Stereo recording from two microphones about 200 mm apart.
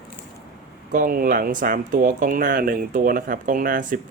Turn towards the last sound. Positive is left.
turn(degrees=-45)  # may be behind; listen again after turning